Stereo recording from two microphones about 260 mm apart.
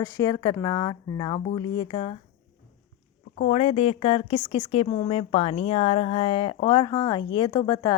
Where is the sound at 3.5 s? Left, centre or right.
Left.